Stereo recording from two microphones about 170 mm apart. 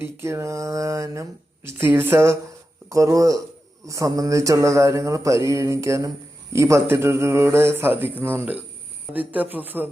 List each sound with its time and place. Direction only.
0.0 s speech: 15° right (ahead or behind)